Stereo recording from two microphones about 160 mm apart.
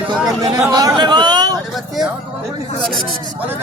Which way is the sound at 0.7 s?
25° right (ahead or behind).